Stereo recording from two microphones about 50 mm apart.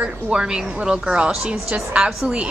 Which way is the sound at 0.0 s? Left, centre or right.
Centre.